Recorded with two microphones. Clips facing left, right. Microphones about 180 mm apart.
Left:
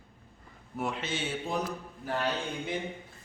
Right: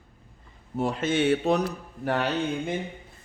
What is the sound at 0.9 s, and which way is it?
Speech, 55° right (ahead or behind).